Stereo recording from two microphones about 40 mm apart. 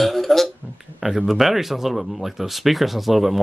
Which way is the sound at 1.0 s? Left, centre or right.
Centre.